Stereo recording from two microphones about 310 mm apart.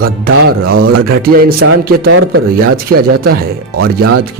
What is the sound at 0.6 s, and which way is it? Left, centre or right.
A man's voice, right.